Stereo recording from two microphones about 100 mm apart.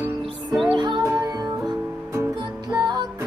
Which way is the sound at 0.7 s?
45° right (ahead or behind).